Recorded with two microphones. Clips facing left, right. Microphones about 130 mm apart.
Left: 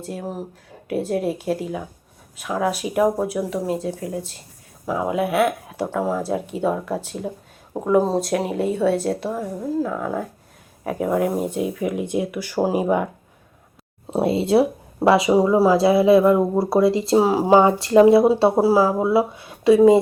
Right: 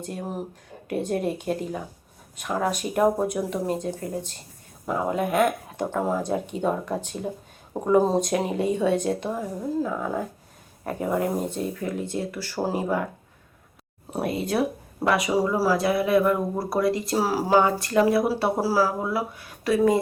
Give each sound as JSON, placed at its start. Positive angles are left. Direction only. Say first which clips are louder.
{"t": 0.0, "sound": "a woman's voice", "louder": "left 2 dB", "side_deg": 0}
{"t": 14.1, "sound": "speech", "louder": "left 8 dB", "side_deg": 25}